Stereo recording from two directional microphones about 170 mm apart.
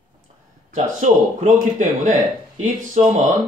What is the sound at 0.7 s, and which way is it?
Speech, 45° right (ahead or behind).